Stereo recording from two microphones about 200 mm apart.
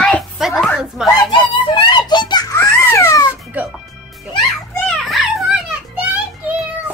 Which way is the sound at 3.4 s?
10° right (ahead or behind).